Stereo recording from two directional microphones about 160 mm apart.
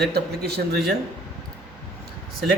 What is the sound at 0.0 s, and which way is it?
Speech, 90° right.